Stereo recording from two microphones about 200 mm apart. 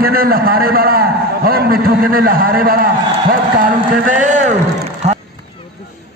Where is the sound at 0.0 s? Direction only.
50° right (ahead or behind).